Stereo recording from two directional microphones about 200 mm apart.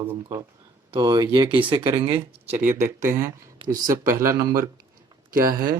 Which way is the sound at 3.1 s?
15° right (ahead or behind).